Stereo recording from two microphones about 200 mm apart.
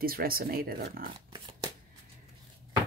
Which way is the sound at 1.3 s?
25° right (ahead or behind).